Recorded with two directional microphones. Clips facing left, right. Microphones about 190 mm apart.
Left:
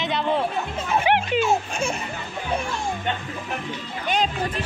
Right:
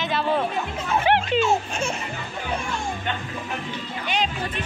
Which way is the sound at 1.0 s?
10° left (ahead or behind).